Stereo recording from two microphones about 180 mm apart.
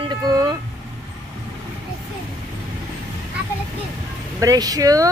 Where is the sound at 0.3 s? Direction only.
20° right (ahead or behind).